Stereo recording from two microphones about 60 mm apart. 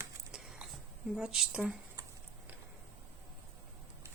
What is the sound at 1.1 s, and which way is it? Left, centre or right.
Speech, centre.